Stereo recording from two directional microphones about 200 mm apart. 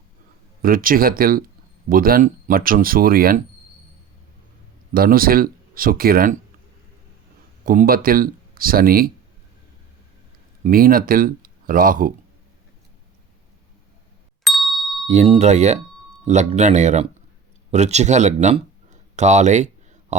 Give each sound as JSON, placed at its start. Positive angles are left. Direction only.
{"t": 0.6, "sound": "speech", "side_deg": -45}
{"t": 4.9, "sound": "speech", "side_deg": -45}
{"t": 7.6, "sound": "speech", "side_deg": -45}
{"t": 10.6, "sound": "speech", "side_deg": -45}
{"t": 14.4, "sound": "ding", "side_deg": 0}
{"t": 15.0, "sound": "speech", "side_deg": -35}
{"t": 17.7, "sound": "a sound", "side_deg": -35}